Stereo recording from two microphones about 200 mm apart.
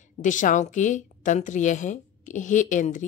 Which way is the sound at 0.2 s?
40° left (ahead or behind).